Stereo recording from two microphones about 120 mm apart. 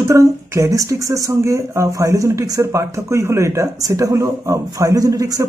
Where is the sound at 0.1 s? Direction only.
25° right (ahead or behind).